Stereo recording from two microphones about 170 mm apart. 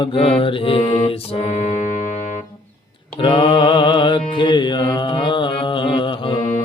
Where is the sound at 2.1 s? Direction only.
45° left (ahead or behind).